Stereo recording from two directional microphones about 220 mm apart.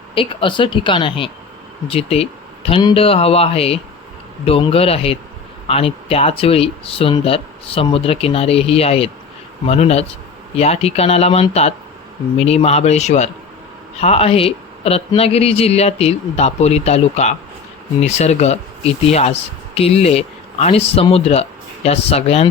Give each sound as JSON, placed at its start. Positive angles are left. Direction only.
{"t": 0.1, "sound": "speech", "side_deg": 25}